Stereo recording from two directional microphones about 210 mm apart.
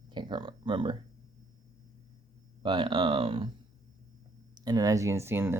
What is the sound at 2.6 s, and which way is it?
Speech, 25° right (ahead or behind).